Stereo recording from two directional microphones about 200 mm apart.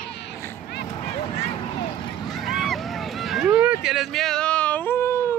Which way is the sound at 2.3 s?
Centre (ahead or behind).